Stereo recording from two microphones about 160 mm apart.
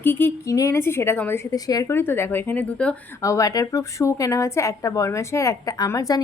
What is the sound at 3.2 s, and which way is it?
A woman's voice, 20° left (ahead or behind).